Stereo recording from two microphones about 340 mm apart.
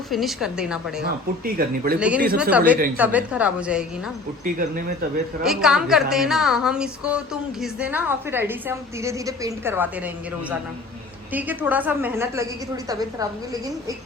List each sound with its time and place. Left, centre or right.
0.1 s a woman's voice: centre
1.5 s speech: right
2.0 s a woman's voice: centre
4.4 s speech: right
5.4 s a woman's voice: centre
11.3 s a woman's voice: centre